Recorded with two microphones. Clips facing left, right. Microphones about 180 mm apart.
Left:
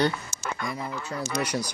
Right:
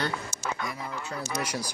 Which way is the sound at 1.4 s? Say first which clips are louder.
Left 5 dB; 10° right (ahead or behind).